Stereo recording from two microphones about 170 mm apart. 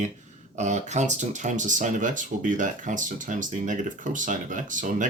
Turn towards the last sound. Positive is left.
turn(degrees=-50)  # may be behind; listen again after turning